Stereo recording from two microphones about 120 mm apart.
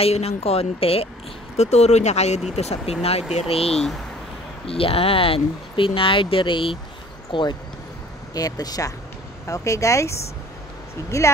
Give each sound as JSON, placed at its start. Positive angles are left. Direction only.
{"t": 0.0, "sound": "speech", "side_deg": 60}
{"t": 1.6, "sound": "speech", "side_deg": 65}
{"t": 3.7, "sound": "speech", "side_deg": 5}
{"t": 4.6, "sound": "speech", "side_deg": 50}